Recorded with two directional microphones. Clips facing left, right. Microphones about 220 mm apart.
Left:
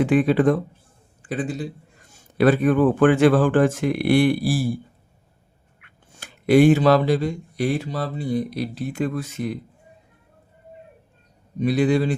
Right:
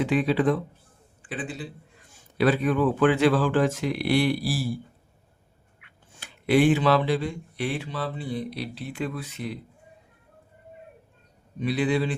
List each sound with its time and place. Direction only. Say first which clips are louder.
0.0 s speech: left 5 dB; 50° left (ahead or behind)
5.8 s speech: left 4 dB; 45° left (ahead or behind)
11.6 s speech: left 5 dB; 45° left (ahead or behind)